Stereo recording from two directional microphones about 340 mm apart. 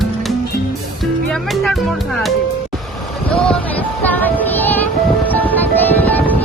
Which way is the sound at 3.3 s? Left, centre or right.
Centre.